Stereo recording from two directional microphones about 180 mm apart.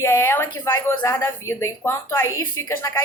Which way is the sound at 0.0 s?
15° left (ahead or behind).